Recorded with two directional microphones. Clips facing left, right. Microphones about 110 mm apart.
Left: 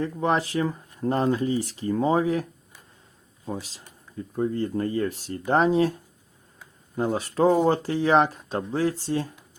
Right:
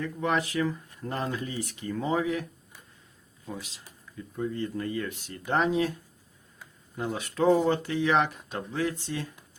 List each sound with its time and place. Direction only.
0.0 s speech: 30° left (ahead or behind)
6.9 s speech: 35° left (ahead or behind)